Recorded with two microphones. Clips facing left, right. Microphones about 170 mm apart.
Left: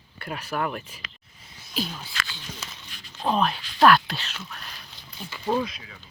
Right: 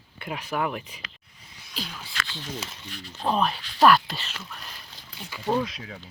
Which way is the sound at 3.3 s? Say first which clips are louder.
Left 1 dB; 5° right (ahead or behind).